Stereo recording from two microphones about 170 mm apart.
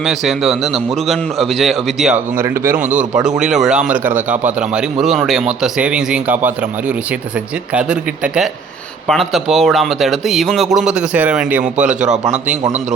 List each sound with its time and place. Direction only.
0.0 s a man's voice: centre (ahead or behind)
2.3 s a man's voice: 15° right (ahead or behind)
2.8 s speech: 45° right (ahead or behind)
3.2 s a man's voice: 5° right (ahead or behind)